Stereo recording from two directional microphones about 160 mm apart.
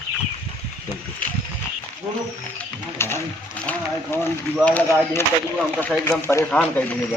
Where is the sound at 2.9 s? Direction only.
15° left (ahead or behind).